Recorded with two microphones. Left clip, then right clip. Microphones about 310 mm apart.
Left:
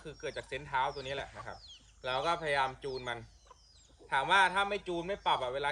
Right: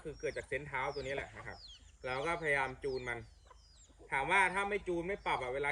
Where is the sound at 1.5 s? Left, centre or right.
Right.